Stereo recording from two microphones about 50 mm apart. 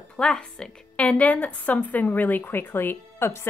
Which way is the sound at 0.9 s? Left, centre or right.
Left.